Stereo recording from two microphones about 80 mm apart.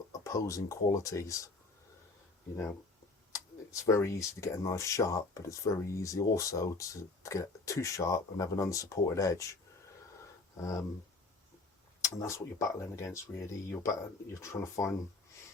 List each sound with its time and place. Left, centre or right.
0.1 s speech: left
3.3 s speech: left
10.6 s speech: left
12.0 s speech: left